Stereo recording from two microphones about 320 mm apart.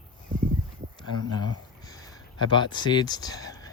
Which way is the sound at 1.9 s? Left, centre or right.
Centre.